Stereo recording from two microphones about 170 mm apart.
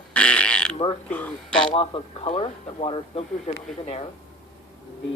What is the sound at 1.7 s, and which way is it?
Speech, 35° left (ahead or behind).